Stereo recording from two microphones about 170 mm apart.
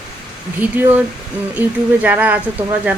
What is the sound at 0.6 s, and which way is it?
Speech, 10° right (ahead or behind).